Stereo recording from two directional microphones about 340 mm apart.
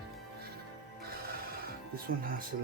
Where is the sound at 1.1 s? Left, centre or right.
Right.